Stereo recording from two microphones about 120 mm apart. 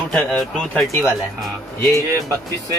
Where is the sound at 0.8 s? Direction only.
25° left (ahead or behind).